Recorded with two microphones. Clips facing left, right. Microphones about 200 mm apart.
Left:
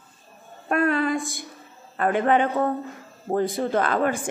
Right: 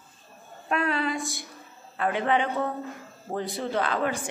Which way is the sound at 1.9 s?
50° left (ahead or behind).